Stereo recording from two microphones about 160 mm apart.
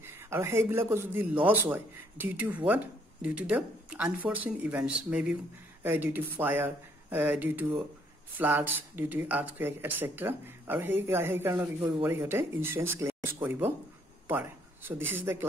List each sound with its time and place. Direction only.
0.0 s speech: 15° right (ahead or behind)